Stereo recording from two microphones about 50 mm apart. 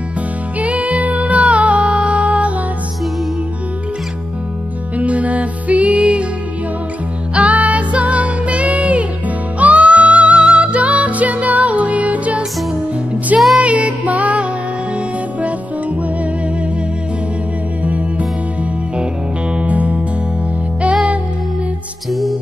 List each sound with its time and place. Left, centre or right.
0.6 s music: right
4.9 s music: right
7.3 s music: right
13.6 s music: right
17.8 s music: right
19.5 s music: right
22.1 s music: centre